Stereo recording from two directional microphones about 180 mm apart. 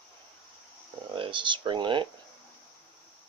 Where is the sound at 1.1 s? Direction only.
30° right (ahead or behind).